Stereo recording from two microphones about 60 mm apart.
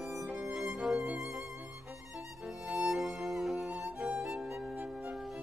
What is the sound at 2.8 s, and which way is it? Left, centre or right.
Music, centre.